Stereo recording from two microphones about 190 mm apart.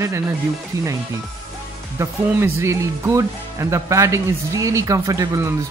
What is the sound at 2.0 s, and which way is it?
Speech, 15° right (ahead or behind).